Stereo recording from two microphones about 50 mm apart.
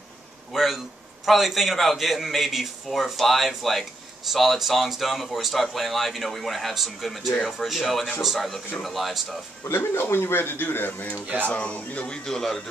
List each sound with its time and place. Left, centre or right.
0.5 s a man's voice: centre
9.7 s speech: left
12.3 s speech: centre